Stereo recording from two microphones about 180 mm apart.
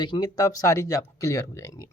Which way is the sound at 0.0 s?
25° left (ahead or behind).